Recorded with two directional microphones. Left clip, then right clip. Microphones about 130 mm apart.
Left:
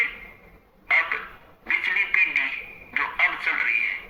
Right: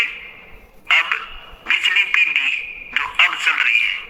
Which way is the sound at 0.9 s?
20° right (ahead or behind).